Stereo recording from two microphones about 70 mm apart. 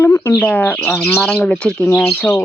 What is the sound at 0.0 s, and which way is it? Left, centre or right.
Speech, left.